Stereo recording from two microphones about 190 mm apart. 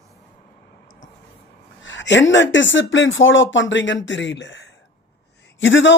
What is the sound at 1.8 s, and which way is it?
Speech, 75° left (ahead or behind).